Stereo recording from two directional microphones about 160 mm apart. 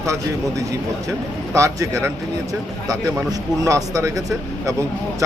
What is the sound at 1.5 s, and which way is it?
A man's voice, 20° right (ahead or behind).